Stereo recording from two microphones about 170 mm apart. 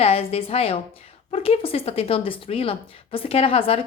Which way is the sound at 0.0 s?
35° left (ahead or behind).